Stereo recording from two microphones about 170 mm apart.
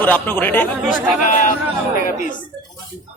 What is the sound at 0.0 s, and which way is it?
Speech, 10° left (ahead or behind).